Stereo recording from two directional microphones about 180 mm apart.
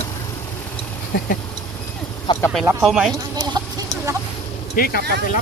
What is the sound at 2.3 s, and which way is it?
Speech, 25° left (ahead or behind).